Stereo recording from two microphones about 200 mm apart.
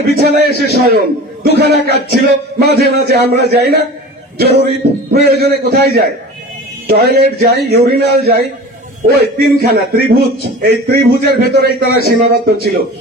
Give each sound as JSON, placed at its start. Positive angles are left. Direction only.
{"t": 0.1, "sound": "a man's voice", "side_deg": -55}